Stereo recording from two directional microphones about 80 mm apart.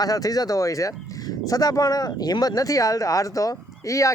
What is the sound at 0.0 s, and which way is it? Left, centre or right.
Speech, left.